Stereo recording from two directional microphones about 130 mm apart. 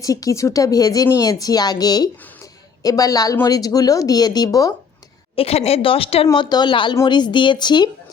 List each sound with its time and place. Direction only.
0.0 s speech: 25° left (ahead or behind)
5.4 s speech: 50° left (ahead or behind)
6.3 s speech: 35° left (ahead or behind)